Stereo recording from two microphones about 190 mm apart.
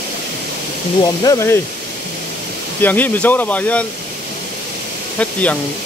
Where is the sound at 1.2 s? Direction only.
15° left (ahead or behind).